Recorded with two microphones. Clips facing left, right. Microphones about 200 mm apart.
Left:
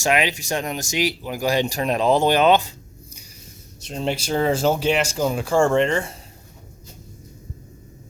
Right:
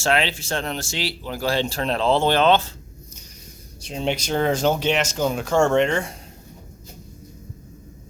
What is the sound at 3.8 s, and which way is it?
Speech, centre (ahead or behind).